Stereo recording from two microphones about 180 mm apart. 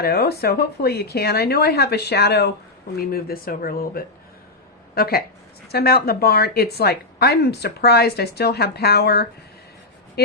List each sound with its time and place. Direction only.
0.0 s a woman's voice: 60° left (ahead or behind)
2.9 s a woman's voice: 55° left (ahead or behind)